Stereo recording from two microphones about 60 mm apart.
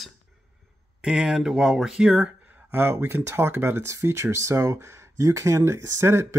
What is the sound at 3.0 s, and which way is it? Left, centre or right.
Speech, right.